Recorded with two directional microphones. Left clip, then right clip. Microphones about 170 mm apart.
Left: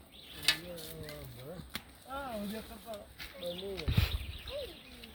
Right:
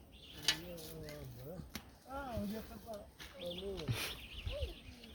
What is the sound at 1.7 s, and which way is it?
Chop, 5° right (ahead or behind).